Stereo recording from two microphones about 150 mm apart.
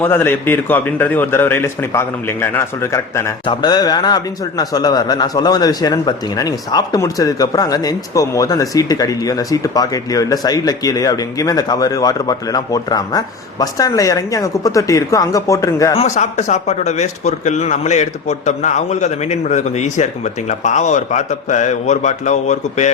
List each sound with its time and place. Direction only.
0.0 s a man's voice: 15° left (ahead or behind)
16.0 s speech: 50° left (ahead or behind)